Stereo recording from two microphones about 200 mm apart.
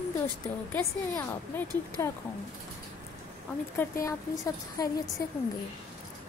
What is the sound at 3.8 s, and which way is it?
Speech, 10° left (ahead or behind).